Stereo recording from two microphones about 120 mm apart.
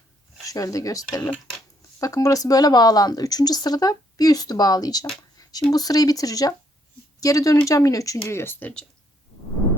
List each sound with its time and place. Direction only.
0.4 s speech: 30° left (ahead or behind)
5.4 s a sound: 30° left (ahead or behind)
5.7 s speech: 30° left (ahead or behind); by 8.8 s 15° left (ahead or behind)